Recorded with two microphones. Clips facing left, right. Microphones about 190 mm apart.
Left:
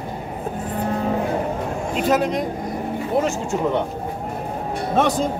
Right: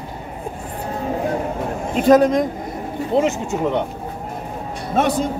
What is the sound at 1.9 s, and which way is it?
Speech, 45° right (ahead or behind).